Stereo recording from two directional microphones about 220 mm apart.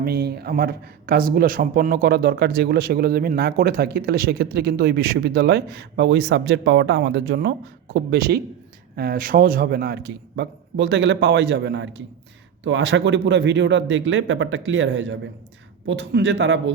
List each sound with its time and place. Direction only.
0.0 s a man's voice: 45° right (ahead or behind)